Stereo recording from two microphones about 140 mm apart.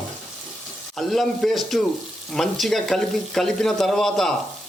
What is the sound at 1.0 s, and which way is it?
Stir, centre (ahead or behind).